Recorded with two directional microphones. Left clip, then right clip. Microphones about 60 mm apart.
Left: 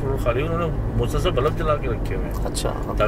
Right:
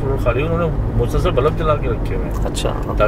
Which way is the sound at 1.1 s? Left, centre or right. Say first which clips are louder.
Right 5 dB; left.